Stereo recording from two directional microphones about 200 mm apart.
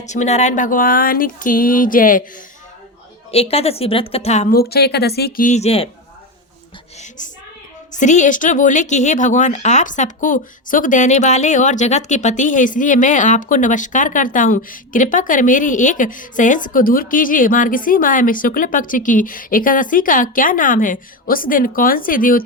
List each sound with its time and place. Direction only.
0.0 s speech: 35° left (ahead or behind)
3.3 s a woman's voice: 30° left (ahead or behind)
4.4 s speech: 50° left (ahead or behind)
5.5 s speech: 35° left (ahead or behind)
7.9 s speech: 35° left (ahead or behind)